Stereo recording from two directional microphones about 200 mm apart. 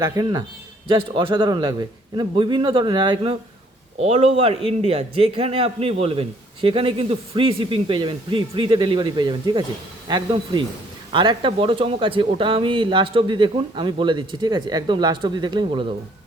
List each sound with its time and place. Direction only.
0.0 s a man's voice: 20° right (ahead or behind)